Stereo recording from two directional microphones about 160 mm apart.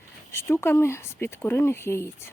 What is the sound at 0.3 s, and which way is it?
Speech, 15° left (ahead or behind).